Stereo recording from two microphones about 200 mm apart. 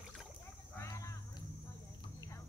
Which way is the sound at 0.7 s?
15° left (ahead or behind).